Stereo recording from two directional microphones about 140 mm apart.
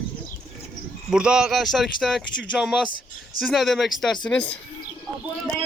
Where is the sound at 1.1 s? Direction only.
5° right (ahead or behind).